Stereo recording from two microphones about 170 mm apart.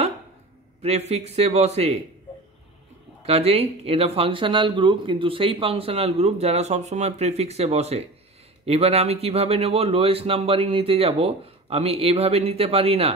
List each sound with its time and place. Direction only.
0.8 s speech: 40° right (ahead or behind)
3.3 s speech: 35° right (ahead or behind)